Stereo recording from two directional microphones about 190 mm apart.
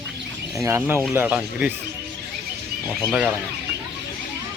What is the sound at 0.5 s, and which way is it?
Speech, 15° right (ahead or behind).